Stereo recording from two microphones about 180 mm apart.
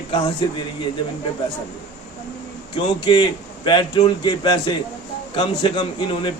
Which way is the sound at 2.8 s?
25° left (ahead or behind).